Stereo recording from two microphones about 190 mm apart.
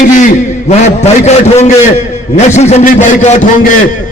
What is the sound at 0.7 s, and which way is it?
A man's voice, 35° left (ahead or behind).